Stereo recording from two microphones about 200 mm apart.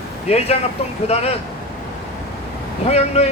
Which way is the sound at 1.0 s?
30° left (ahead or behind).